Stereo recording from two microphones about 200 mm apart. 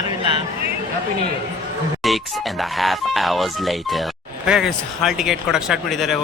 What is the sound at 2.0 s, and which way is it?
Speech, centre (ahead or behind).